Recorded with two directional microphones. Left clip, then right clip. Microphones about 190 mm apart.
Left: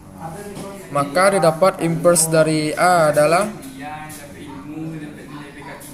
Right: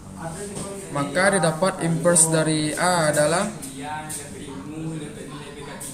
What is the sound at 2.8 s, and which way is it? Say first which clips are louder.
Speech: left 7 dB; 20° left (ahead or behind).